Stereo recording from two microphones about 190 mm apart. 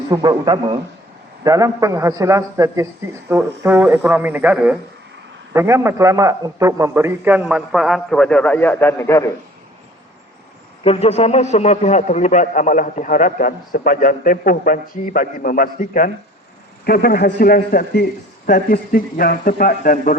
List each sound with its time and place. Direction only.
0.1 s a man's voice: 20° right (ahead or behind); by 9.3 s 15° left (ahead or behind)
10.8 s a man's voice: 35° left (ahead or behind)